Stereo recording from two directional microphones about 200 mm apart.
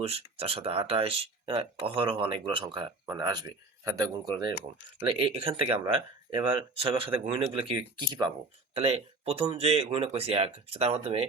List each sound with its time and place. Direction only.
0.0 s speech: 30° right (ahead or behind)
5.0 s speech: 30° right (ahead or behind)